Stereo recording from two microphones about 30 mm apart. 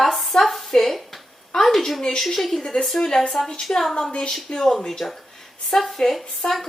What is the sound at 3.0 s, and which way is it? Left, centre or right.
Speech, left.